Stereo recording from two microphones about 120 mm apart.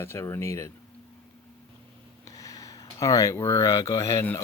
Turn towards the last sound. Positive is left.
turn(degrees=25)  # may be behind; listen again after turning